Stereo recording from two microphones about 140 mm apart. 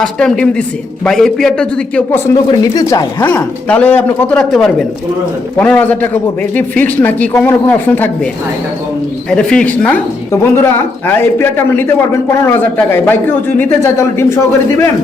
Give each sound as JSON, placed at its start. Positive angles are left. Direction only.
{"t": 0.0, "sound": "a man's voice", "side_deg": 5}
{"t": 2.3, "sound": "speech", "side_deg": 25}
{"t": 3.2, "sound": "speech", "side_deg": 10}
{"t": 9.3, "sound": "speech", "side_deg": 5}